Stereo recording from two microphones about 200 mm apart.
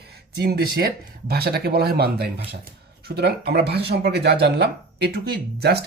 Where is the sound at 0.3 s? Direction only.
50° right (ahead or behind).